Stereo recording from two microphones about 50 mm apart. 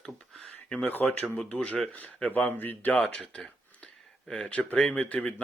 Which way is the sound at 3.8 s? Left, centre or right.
Centre.